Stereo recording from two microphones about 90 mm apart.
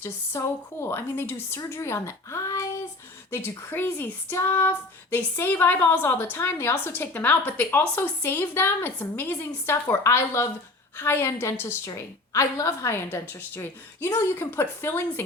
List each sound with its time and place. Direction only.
0.0 s a woman's voice: 30° left (ahead or behind)
3.3 s a woman's voice: 25° left (ahead or behind)